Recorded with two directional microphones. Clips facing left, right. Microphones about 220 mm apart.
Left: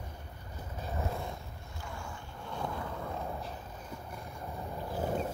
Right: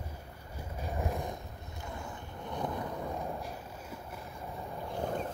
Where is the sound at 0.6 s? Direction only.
10° right (ahead or behind).